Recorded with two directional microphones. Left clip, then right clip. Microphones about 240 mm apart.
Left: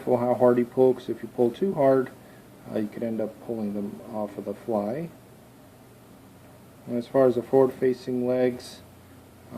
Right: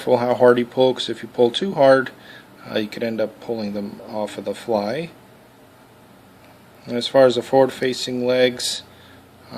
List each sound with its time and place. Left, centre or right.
0.0 s speech: right
4.8 s speech: right
6.9 s speech: right